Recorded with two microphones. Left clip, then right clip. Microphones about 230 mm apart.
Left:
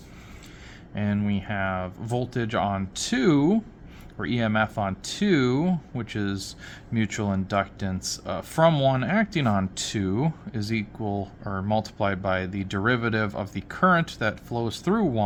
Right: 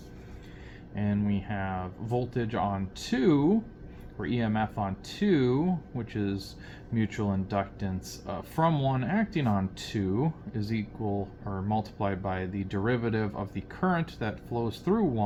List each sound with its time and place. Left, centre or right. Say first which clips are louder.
0.9 s speech: left 3 dB; left